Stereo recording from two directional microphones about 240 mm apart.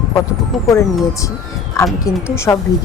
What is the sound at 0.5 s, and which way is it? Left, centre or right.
Speech, centre.